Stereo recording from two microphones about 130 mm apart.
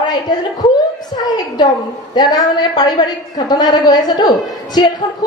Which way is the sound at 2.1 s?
30° left (ahead or behind).